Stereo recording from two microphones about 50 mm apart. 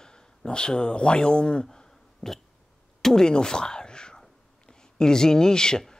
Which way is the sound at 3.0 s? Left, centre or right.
Centre.